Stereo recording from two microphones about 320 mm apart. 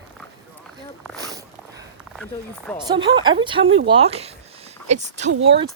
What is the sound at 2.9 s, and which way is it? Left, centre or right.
Speech, centre.